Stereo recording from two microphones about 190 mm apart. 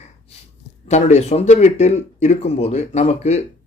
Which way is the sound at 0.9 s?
35° left (ahead or behind).